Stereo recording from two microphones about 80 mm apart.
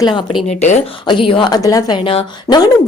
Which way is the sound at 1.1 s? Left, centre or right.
Left.